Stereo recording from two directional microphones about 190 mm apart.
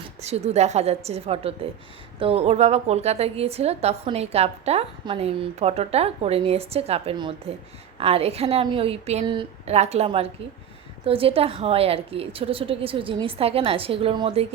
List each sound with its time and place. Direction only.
0.2 s a woman's voice: 35° right (ahead or behind)